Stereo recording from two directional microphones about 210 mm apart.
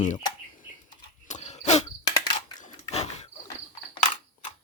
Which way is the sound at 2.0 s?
20° left (ahead or behind).